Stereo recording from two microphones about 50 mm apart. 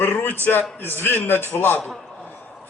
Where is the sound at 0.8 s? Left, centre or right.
Left.